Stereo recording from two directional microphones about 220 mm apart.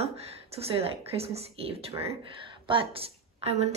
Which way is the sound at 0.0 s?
30° right (ahead or behind).